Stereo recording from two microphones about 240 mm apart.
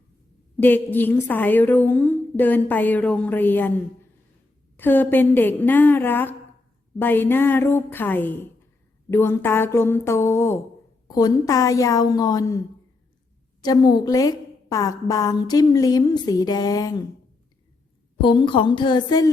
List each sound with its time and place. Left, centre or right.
0.6 s a woman's voice: centre
4.8 s a woman's voice: centre
18.2 s a woman's voice: left